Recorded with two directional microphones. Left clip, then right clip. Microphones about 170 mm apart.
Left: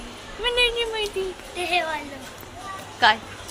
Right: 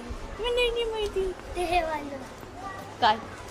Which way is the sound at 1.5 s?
20° right (ahead or behind).